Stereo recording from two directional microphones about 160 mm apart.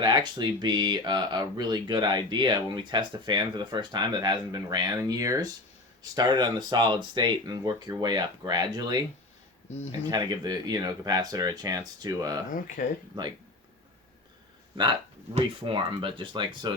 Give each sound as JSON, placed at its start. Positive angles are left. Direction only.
{"t": 0.0, "sound": "speech", "side_deg": -30}
{"t": 10.1, "sound": "speech", "side_deg": -25}
{"t": 12.5, "sound": "speech", "side_deg": 55}
{"t": 13.2, "sound": "speech", "side_deg": -30}
{"t": 15.4, "sound": "speech", "side_deg": -35}